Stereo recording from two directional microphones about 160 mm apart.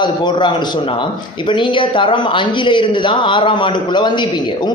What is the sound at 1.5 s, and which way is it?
A man's voice, 30° left (ahead or behind).